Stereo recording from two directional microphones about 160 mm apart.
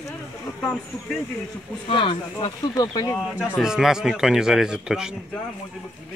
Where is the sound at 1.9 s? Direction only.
35° left (ahead or behind).